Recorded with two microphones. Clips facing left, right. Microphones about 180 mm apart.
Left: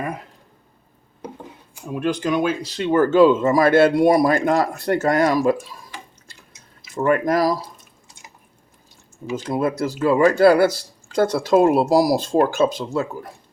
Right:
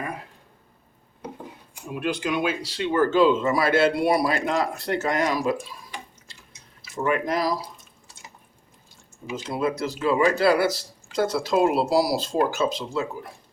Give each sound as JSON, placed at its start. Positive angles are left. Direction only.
{"t": 1.9, "sound": "speech", "side_deg": 45}
{"t": 6.9, "sound": "speech", "side_deg": 50}
{"t": 9.3, "sound": "speech", "side_deg": 50}